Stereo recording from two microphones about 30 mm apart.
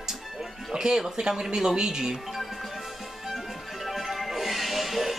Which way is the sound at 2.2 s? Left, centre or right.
Centre.